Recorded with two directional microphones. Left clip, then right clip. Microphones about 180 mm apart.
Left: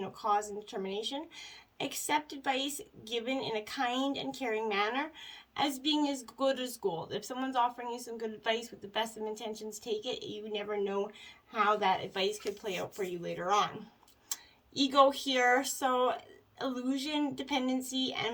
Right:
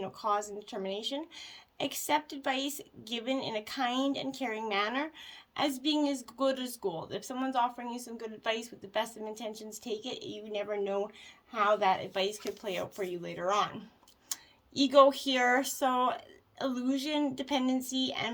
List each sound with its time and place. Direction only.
0.0 s speech: 30° right (ahead or behind)
14.3 s tick: 35° right (ahead or behind)
14.8 s speech: 35° right (ahead or behind)